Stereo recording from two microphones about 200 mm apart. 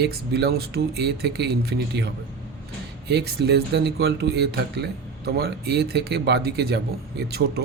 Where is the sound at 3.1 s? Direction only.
55° right (ahead or behind).